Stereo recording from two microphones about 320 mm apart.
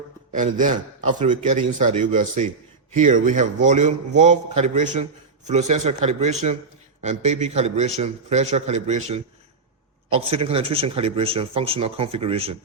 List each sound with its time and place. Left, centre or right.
0.3 s a man's voice: right